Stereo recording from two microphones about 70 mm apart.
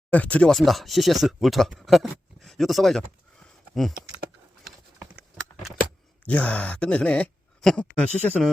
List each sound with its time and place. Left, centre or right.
0.1 s speech: left
0.5 s speech: centre
6.2 s speech: centre